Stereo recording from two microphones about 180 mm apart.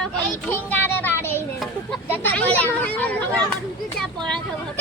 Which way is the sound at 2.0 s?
10° left (ahead or behind).